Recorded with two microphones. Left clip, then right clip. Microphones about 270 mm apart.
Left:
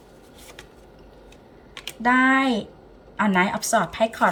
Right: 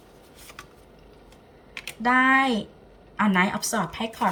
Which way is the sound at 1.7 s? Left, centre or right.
Centre.